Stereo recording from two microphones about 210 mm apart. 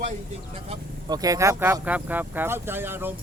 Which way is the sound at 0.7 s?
20° right (ahead or behind).